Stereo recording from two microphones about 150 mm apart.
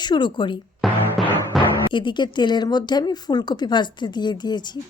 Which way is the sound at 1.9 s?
30° left (ahead or behind).